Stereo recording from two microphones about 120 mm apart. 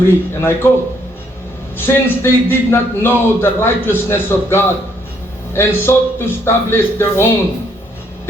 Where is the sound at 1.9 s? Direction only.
20° left (ahead or behind).